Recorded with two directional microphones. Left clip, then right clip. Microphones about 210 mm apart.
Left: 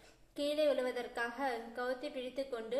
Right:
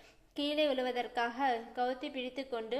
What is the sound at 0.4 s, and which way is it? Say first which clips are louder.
A woman's voice: right 1 dB; 35° right (ahead or behind).